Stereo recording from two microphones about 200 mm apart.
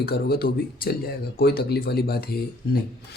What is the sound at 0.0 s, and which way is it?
Speech, 50° left (ahead or behind).